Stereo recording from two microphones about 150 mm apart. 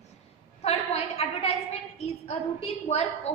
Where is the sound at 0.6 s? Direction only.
45° left (ahead or behind).